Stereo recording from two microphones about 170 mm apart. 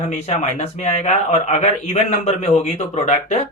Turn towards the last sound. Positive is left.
turn(degrees=40)  # may be behind; listen again after turning